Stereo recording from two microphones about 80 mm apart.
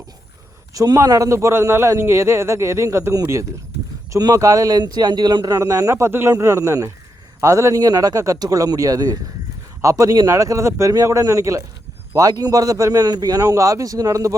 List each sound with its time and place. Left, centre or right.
0.7 s a man's voice: right
4.2 s speech: right
4.8 s a man's voice: right
5.5 s a man's voice: right